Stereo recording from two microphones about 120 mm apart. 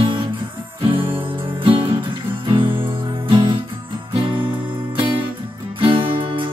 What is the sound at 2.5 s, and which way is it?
Music, 45° right (ahead or behind).